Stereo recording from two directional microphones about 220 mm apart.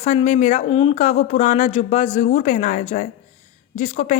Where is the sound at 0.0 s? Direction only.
30° left (ahead or behind).